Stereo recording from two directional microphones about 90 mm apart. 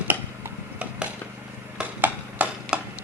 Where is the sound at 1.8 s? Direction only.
15° right (ahead or behind).